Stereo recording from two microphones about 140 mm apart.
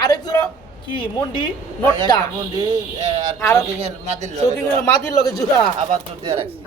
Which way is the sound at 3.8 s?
50° right (ahead or behind).